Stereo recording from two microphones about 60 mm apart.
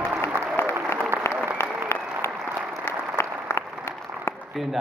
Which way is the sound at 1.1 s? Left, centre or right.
Centre.